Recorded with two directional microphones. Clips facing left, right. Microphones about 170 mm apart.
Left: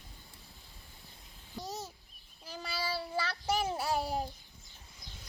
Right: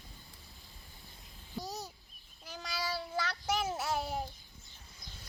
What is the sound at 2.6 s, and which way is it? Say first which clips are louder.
Child singing: left 1 dB; 10° left (ahead or behind).